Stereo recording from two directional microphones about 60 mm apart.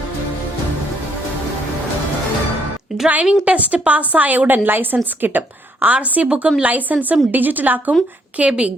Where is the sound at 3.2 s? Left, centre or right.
Right.